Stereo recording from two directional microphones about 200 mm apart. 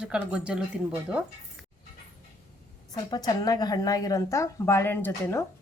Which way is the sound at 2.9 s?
20° left (ahead or behind).